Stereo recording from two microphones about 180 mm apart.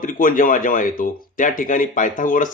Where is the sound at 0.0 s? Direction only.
50° left (ahead or behind).